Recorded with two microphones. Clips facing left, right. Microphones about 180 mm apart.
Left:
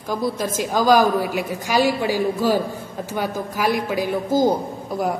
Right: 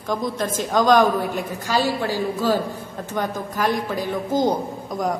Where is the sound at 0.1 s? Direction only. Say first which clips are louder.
Left 1 dB; 5° left (ahead or behind).